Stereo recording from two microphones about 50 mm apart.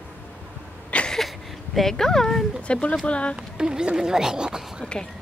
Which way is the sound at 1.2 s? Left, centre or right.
Centre.